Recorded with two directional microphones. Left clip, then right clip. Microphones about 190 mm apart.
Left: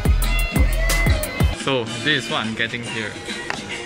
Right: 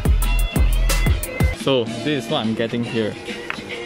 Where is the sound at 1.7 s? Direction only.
15° right (ahead or behind).